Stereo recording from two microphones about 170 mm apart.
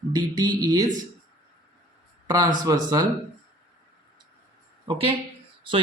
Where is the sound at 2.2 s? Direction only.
25° right (ahead or behind).